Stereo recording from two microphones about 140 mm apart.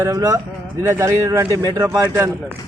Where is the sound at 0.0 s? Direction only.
25° right (ahead or behind).